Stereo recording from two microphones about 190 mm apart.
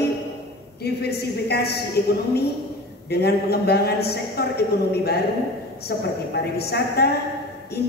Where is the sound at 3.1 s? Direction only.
55° left (ahead or behind).